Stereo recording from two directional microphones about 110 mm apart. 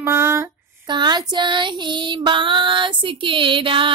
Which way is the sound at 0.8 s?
45° right (ahead or behind).